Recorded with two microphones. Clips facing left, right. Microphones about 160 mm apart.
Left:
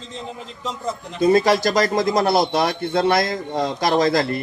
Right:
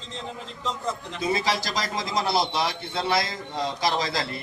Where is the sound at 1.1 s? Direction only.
50° left (ahead or behind).